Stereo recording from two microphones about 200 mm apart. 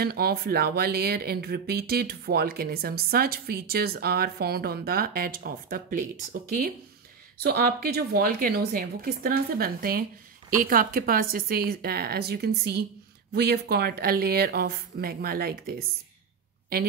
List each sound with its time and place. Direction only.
0.0 s speech: 50° right (ahead or behind)
7.4 s speech: 50° right (ahead or behind)